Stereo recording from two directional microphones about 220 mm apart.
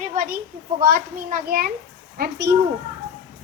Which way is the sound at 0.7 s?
40° right (ahead or behind).